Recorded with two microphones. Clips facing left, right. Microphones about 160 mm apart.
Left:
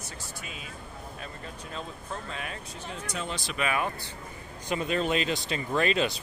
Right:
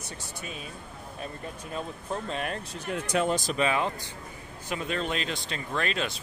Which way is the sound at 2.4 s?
60° right (ahead or behind).